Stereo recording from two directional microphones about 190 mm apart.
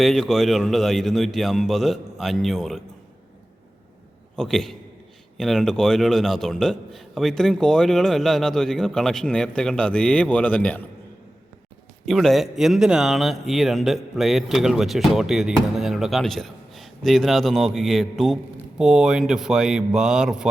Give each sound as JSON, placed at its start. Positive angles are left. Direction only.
{"t": 0.0, "sound": "a man's voice", "side_deg": 0}
{"t": 4.4, "sound": "a man's voice", "side_deg": 5}
{"t": 12.0, "sound": "a man's voice", "side_deg": 0}